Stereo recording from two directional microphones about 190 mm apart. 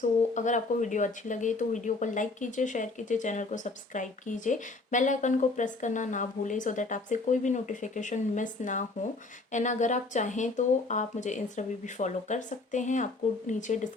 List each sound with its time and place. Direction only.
0.3 s speech: 40° left (ahead or behind)